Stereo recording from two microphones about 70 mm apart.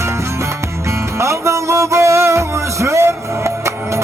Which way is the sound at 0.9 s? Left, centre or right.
Right.